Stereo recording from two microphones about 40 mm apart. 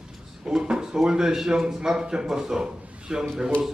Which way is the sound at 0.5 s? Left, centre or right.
Centre.